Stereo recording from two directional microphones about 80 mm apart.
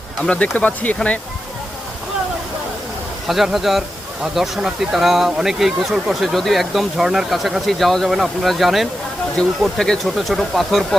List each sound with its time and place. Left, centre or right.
0.3 s speech: centre
3.2 s speech: centre
9.3 s speech: centre